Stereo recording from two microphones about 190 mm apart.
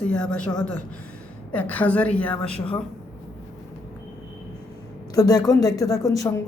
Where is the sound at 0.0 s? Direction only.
5° left (ahead or behind).